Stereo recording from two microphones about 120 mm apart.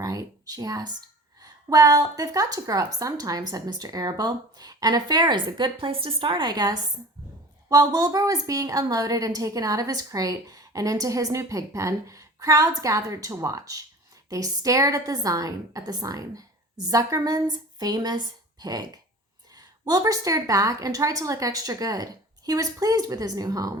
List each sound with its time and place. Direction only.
0.0 s a woman's voice: 30° right (ahead or behind)